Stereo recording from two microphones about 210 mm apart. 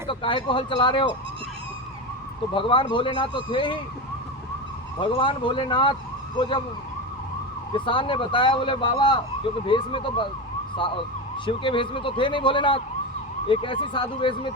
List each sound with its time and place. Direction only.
0.1 s speech: 25° left (ahead or behind)
2.5 s speech: 25° left (ahead or behind)
5.1 s speech: 25° left (ahead or behind)
7.7 s speech: 25° left (ahead or behind)
11.4 s speech: 25° left (ahead or behind)